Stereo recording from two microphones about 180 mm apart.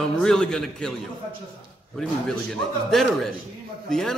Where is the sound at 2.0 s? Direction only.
5° left (ahead or behind).